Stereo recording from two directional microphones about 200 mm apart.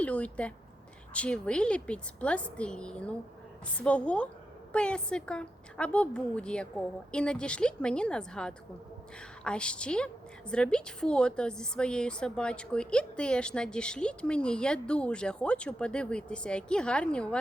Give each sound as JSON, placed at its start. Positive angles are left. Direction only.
{"t": 0.0, "sound": "a woman's voice", "side_deg": 5}